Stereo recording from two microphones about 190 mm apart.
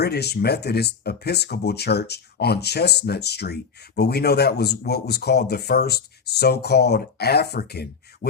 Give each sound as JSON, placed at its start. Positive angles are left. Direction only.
{"t": 0.0, "sound": "speech", "side_deg": 60}